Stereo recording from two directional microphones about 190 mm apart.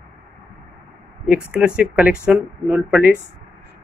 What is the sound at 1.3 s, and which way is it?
Speech, 10° right (ahead or behind).